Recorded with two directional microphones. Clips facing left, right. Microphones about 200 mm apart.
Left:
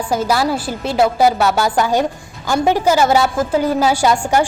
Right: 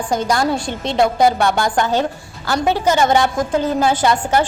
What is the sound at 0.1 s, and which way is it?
A woman's voice, 5° left (ahead or behind).